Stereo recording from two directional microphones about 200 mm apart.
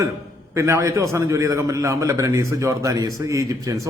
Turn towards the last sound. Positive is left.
turn(degrees=-15)  # may be behind; listen again after turning